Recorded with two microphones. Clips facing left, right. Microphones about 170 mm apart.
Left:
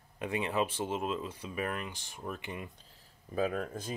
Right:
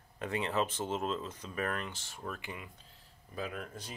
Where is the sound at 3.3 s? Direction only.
45° left (ahead or behind).